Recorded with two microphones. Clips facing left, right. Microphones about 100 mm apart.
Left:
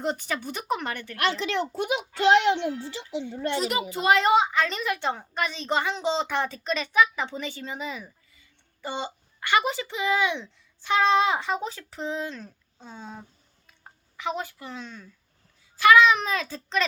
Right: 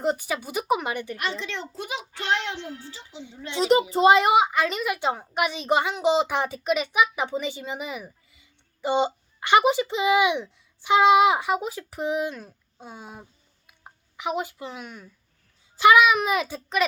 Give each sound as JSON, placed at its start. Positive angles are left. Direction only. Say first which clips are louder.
{"t": 0.0, "sound": "a woman's voice", "louder": "right 3 dB", "side_deg": -5}
{"t": 1.1, "sound": "a child's voice", "louder": "left 5 dB", "side_deg": 80}
{"t": 3.3, "sound": "a child's voice", "louder": "left 7 dB", "side_deg": 60}
{"t": 3.6, "sound": "a child's voice", "louder": "right 14 dB", "side_deg": -30}
{"t": 4.1, "sound": "a woman's voice", "louder": "left 2 dB", "side_deg": -15}
{"t": 13.7, "sound": "a sound", "louder": "right 2 dB", "side_deg": -15}
{"t": 15.8, "sound": "a child's voice", "louder": "right 1 dB", "side_deg": -20}